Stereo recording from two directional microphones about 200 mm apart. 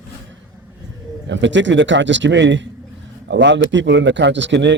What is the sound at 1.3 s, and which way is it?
Speech, 65° right (ahead or behind).